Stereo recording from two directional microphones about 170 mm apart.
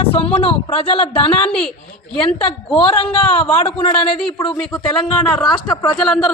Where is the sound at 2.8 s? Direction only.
35° left (ahead or behind).